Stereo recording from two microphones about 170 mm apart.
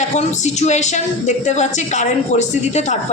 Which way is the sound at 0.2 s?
40° left (ahead or behind).